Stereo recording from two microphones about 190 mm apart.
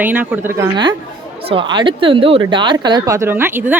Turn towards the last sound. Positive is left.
turn(degrees=-10)  # may be behind; listen again after turning